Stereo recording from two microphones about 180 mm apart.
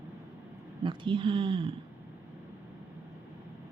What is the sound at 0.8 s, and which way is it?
Speech, 25° right (ahead or behind).